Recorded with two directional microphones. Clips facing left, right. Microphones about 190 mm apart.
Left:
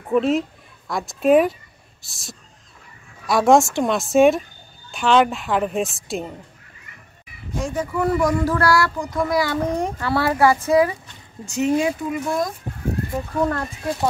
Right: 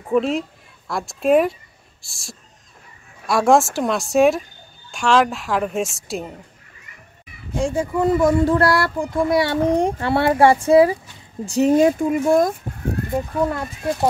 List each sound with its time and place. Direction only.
0.0 s a woman's voice: centre (ahead or behind)
7.6 s speech: 25° right (ahead or behind); by 12.5 s 50° right (ahead or behind)
13.4 s speech: 10° right (ahead or behind)